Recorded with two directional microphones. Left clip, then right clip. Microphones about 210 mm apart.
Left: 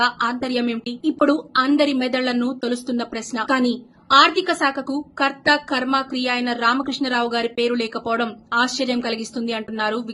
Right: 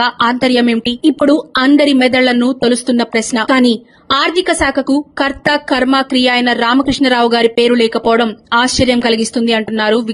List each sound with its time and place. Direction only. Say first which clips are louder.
0.0 s a woman's voice: right 8 dB; 40° right (ahead or behind)